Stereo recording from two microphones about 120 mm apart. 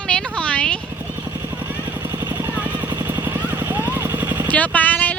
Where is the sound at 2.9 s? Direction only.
20° right (ahead or behind).